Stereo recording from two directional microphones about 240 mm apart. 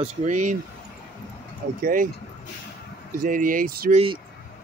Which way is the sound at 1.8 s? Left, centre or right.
Right.